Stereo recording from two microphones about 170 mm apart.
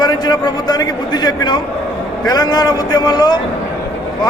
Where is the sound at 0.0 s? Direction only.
25° left (ahead or behind).